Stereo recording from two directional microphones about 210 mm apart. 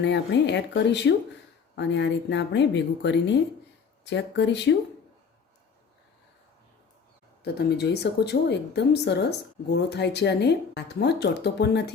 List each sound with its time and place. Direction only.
0.0 s speech: 55° left (ahead or behind)
7.4 s speech: 50° left (ahead or behind)